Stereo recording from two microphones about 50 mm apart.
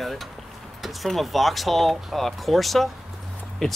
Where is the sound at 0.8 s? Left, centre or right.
Centre.